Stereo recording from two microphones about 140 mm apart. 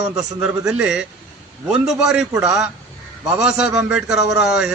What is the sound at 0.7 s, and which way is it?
Speech, 5° right (ahead or behind).